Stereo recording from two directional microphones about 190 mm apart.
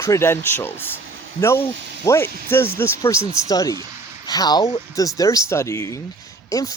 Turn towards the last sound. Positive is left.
turn(degrees=20)  # may be behind; listen again after turning